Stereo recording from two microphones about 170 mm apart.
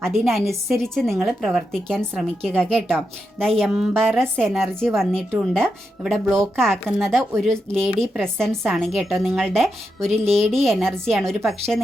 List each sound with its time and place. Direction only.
0.0 s a woman's voice: centre (ahead or behind)